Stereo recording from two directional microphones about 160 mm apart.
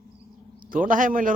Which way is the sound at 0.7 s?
55° right (ahead or behind).